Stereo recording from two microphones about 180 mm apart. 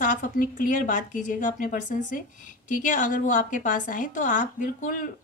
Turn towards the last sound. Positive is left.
turn(degrees=50)  # may be behind; listen again after turning